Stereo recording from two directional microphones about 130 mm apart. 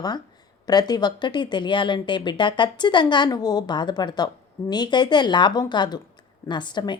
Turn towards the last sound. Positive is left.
turn(degrees=35)  # may be behind; listen again after turning